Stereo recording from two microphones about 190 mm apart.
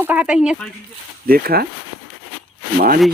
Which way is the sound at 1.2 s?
50° right (ahead or behind).